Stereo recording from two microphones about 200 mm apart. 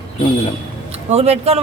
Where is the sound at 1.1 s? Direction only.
30° right (ahead or behind).